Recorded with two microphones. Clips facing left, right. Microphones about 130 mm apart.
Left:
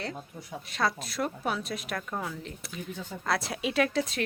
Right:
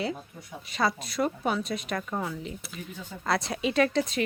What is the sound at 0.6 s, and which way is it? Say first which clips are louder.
A woman's voice: right 2 dB; centre (ahead or behind).